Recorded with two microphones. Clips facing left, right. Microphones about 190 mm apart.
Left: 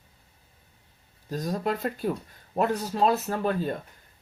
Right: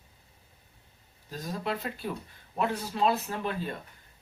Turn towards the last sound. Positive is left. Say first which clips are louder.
# left 6 dB
turn(degrees=40)  # may be behind; listen again after turning